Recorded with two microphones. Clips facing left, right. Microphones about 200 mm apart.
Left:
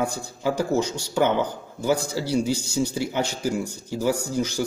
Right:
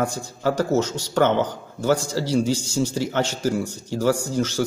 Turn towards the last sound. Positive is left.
turn(degrees=10)  # may be behind; listen again after turning